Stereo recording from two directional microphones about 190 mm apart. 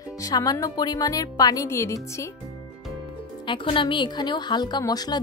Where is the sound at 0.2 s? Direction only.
20° left (ahead or behind).